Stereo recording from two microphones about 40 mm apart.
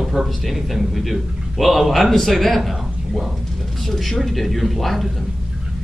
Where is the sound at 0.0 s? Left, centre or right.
Centre.